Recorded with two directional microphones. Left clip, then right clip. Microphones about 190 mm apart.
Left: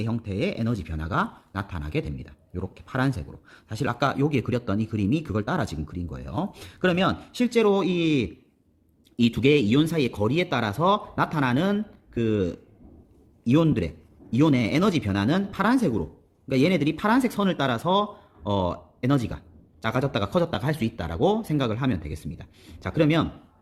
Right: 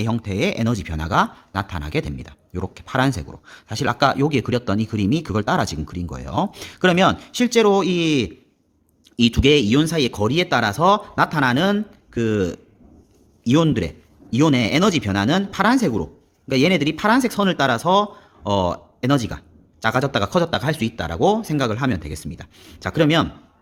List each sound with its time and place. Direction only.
0.0 s speech: 30° right (ahead or behind)